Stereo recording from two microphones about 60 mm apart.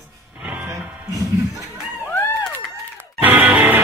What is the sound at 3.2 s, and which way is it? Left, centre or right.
Music, right.